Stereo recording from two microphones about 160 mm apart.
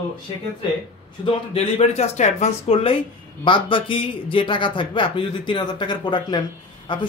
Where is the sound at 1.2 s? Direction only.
40° left (ahead or behind).